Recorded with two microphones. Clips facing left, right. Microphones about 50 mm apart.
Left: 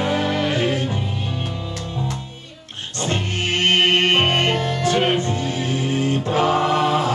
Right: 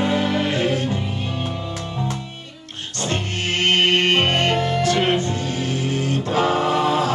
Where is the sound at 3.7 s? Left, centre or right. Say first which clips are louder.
Even; left.